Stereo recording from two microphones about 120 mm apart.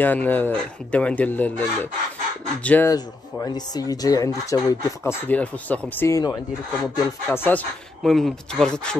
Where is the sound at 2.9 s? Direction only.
35° left (ahead or behind).